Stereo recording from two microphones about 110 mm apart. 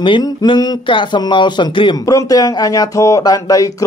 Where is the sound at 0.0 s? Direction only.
45° left (ahead or behind).